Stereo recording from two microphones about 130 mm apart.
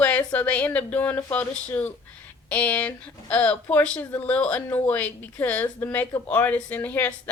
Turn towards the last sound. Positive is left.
turn(degrees=10)  # may be behind; listen again after turning